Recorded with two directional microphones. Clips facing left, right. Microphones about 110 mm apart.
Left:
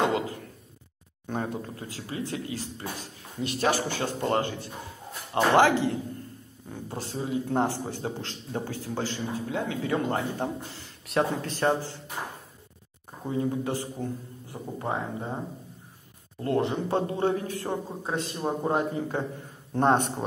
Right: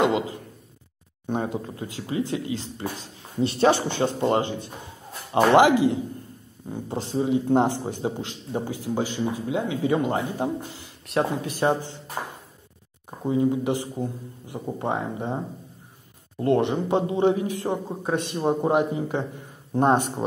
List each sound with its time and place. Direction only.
0.0 s speech: 20° right (ahead or behind)
11.1 s speech: centre (ahead or behind)
11.4 s speech: 15° right (ahead or behind)
13.2 s speech: 15° right (ahead or behind)
16.3 s speech: 25° right (ahead or behind); by 20.2 s 5° right (ahead or behind)